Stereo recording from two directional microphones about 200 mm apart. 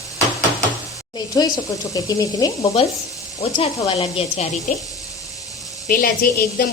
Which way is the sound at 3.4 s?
30° left (ahead or behind).